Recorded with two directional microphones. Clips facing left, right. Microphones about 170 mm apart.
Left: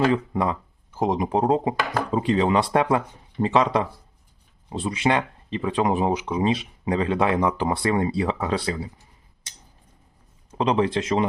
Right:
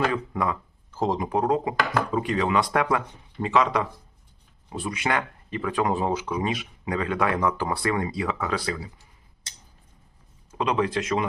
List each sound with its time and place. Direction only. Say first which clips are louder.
0.1 s speech: left 4 dB; 25° left (ahead or behind)
0.9 s speech: left 2 dB; 15° left (ahead or behind)
10.5 s speech: left 3 dB; 30° left (ahead or behind)